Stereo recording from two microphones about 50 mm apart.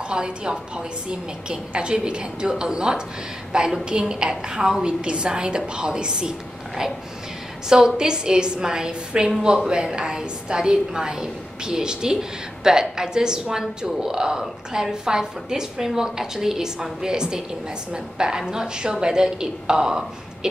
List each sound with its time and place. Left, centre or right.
0.1 s a woman's voice: centre
7.7 s a woman's voice: centre